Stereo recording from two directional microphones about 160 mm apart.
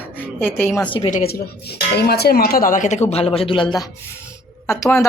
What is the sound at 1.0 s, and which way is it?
Speech, 25° left (ahead or behind).